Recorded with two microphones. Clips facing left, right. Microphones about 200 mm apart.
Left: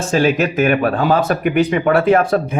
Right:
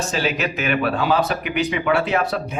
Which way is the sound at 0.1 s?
50° left (ahead or behind).